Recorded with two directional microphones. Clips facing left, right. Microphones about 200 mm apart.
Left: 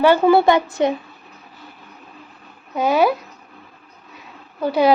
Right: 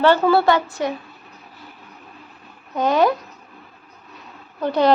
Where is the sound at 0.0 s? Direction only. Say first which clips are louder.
Left 2 dB; 15° left (ahead or behind).